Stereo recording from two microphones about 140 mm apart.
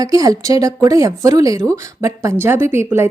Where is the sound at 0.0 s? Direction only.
25° right (ahead or behind).